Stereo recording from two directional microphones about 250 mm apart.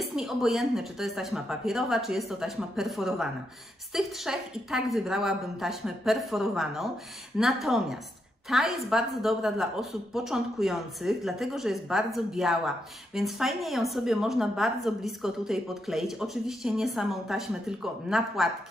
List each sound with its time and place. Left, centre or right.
0.0 s a woman's voice: centre